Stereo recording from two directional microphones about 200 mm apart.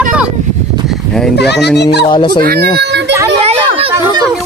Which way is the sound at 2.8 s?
60° right (ahead or behind).